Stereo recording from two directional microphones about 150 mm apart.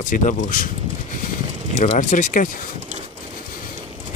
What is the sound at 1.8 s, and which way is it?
Speech, 55° left (ahead or behind).